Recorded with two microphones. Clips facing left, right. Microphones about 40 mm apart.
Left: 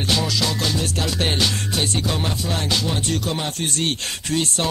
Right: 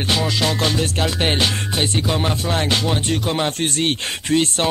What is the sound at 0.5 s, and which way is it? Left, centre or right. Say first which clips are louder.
Music: right 3 dB; right.